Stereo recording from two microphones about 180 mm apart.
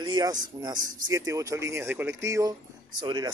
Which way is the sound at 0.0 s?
20° right (ahead or behind).